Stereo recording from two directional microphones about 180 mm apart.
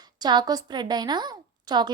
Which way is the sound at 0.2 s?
25° right (ahead or behind).